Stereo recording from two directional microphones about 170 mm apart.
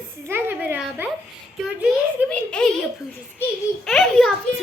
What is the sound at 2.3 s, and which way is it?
Speech, 5° left (ahead or behind).